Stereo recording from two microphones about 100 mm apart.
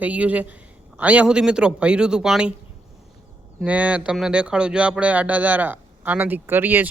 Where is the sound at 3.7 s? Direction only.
15° right (ahead or behind).